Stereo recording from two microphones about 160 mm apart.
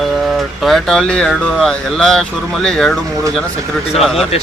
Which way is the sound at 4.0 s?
Centre (ahead or behind).